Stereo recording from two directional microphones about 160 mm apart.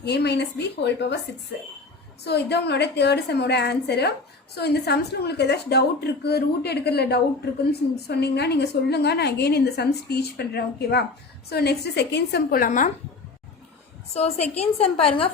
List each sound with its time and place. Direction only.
0.0 s a woman's voice: 90° left
2.2 s a woman's voice: 90° left; by 12.9 s 55° left (ahead or behind)
14.1 s a woman's voice: 40° left (ahead or behind)